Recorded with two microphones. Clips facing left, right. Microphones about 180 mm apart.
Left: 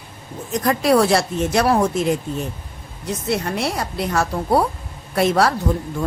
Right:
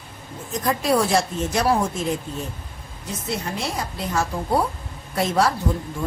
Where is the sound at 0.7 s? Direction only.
70° left (ahead or behind).